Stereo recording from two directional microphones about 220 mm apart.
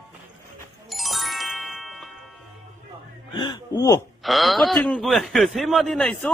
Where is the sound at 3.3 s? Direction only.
20° left (ahead or behind).